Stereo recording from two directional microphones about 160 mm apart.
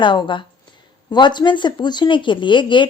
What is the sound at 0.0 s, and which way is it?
Speech, 30° left (ahead or behind).